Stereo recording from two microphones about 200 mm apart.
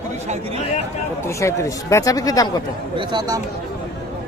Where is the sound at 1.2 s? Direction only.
15° left (ahead or behind).